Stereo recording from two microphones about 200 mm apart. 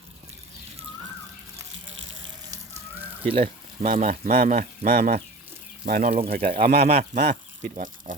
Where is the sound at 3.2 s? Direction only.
30° right (ahead or behind).